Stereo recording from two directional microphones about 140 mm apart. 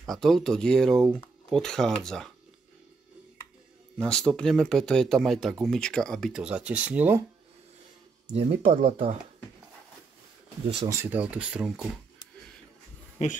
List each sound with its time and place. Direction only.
0.0 s speech: centre (ahead or behind)
4.0 s speech: 5° left (ahead or behind)
8.4 s speech: 45° right (ahead or behind)
10.9 s speech: 15° right (ahead or behind)